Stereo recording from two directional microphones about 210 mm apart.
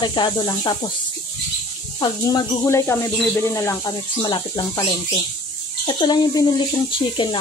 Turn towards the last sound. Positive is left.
turn(degrees=25)  # may be behind; listen again after turning